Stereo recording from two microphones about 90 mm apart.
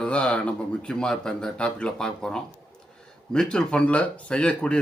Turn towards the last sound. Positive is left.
turn(degrees=10)  # may be behind; listen again after turning